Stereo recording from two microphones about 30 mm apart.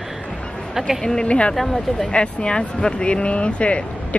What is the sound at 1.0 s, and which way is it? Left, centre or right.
Speech, centre.